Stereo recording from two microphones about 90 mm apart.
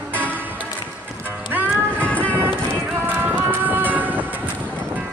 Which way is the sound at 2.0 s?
15° left (ahead or behind).